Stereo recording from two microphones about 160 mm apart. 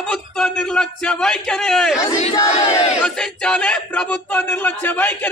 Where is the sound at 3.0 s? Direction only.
5° left (ahead or behind).